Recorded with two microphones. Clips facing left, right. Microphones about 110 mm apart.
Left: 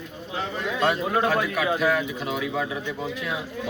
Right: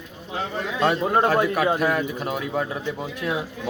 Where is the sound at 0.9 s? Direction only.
45° right (ahead or behind).